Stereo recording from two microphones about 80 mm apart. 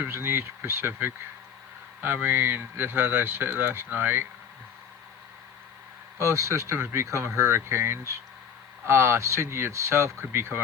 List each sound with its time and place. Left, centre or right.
0.0 s speech: right
6.1 s speech: right